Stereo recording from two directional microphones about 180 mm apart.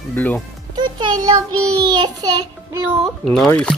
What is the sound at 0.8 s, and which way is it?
Music, 25° right (ahead or behind).